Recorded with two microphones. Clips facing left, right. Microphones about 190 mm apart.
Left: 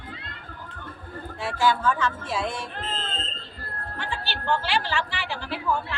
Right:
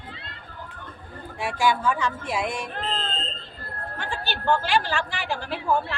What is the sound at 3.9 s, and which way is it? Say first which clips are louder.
A woman's voice: right 1 dB; 45° right (ahead or behind).